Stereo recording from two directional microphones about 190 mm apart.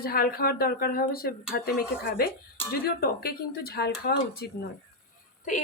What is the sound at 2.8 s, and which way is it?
A woman's voice, 55° left (ahead or behind).